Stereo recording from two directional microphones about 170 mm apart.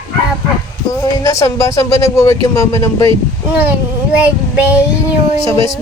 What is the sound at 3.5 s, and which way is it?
Child singing, 10° right (ahead or behind).